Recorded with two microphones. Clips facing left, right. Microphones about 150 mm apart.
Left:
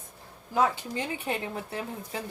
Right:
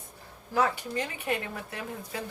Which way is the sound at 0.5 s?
20° left (ahead or behind).